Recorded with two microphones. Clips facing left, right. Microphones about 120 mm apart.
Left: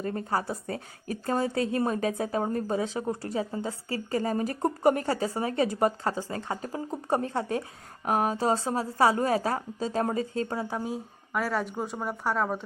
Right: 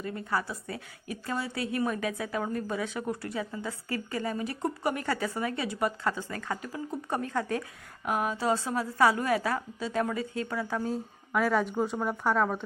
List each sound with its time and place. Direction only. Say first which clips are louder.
0.0 s a woman's voice: left 3 dB; 40° left (ahead or behind)
5.0 s a woman's voice: left 2 dB; 30° left (ahead or behind)
8.0 s a woman's voice: left 3 dB; 40° left (ahead or behind)
10.8 s a woman's voice: right 1 dB; 5° left (ahead or behind)